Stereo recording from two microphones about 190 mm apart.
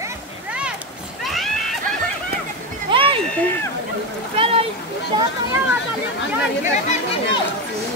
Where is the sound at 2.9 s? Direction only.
30° right (ahead or behind).